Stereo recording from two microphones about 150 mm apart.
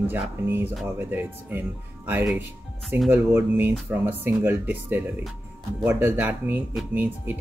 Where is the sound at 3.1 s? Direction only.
15° right (ahead or behind).